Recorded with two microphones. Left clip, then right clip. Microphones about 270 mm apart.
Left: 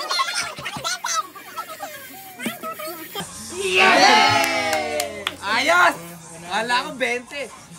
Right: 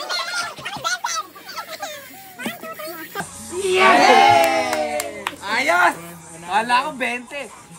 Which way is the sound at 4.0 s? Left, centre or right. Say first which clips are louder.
Right 3 dB; centre.